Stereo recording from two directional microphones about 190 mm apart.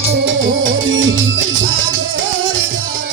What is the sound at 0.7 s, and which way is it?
Music, 85° right.